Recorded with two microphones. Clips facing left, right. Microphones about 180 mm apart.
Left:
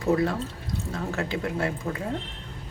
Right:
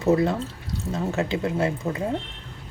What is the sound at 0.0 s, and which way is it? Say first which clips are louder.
Speech: right 3 dB; 20° right (ahead or behind).